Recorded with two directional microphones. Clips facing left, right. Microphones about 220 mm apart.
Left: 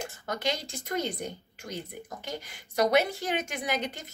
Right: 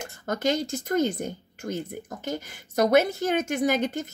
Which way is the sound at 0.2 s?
45° right (ahead or behind).